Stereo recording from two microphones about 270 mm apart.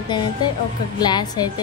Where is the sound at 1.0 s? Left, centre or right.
Centre.